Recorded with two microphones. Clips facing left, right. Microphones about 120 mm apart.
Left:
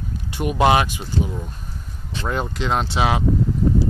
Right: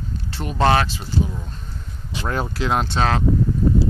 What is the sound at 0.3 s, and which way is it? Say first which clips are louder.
Speech: left 2 dB; 15° left (ahead or behind).